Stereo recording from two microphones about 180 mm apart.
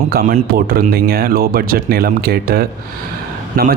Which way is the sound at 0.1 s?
55° right (ahead or behind).